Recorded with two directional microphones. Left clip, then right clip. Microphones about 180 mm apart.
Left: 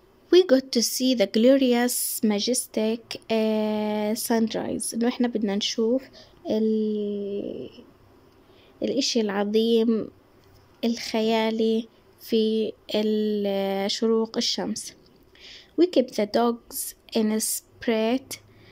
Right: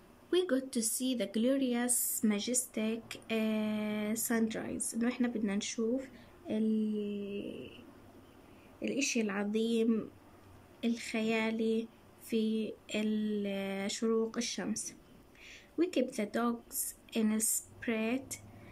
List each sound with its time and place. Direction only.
0.3 s speech: 35° left (ahead or behind)
8.7 s a woman's voice: 30° left (ahead or behind)